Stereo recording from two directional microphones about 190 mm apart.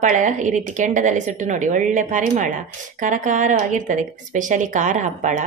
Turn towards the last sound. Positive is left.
turn(degrees=-40)  # may be behind; listen again after turning